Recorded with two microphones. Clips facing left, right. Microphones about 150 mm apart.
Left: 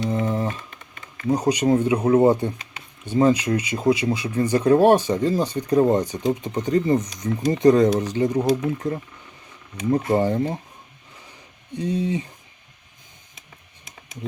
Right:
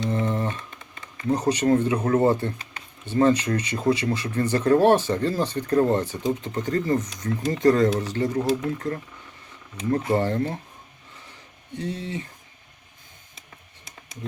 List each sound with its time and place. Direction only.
0.1 s typing: 10° left (ahead or behind)
1.3 s speech: 10° left (ahead or behind)
11.7 s speech: 15° left (ahead or behind)